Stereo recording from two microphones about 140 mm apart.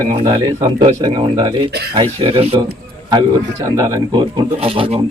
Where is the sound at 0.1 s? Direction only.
40° right (ahead or behind).